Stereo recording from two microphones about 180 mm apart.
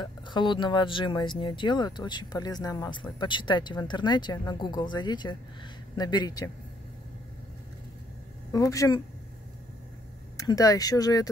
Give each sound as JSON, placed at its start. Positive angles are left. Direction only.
{"t": 0.0, "sound": "speech", "side_deg": 25}
{"t": 8.5, "sound": "speech", "side_deg": 20}
{"t": 10.3, "sound": "speech", "side_deg": 20}